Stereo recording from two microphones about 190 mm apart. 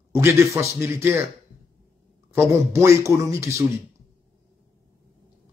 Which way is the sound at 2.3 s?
15° right (ahead or behind).